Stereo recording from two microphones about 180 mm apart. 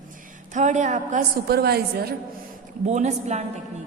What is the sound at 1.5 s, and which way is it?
Speech, 60° right (ahead or behind).